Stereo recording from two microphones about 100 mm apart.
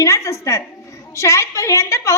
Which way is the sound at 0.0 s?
30° left (ahead or behind).